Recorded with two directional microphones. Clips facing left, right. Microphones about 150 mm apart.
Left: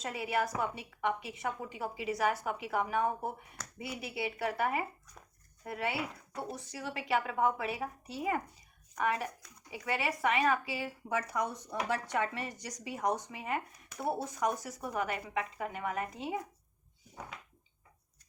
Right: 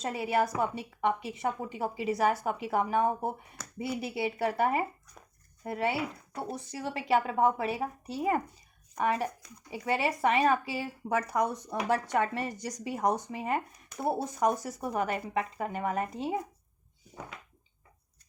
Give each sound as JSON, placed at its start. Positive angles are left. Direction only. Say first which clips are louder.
{"t": 0.0, "sound": "a woman's voice", "louder": "right 5 dB", "side_deg": -35}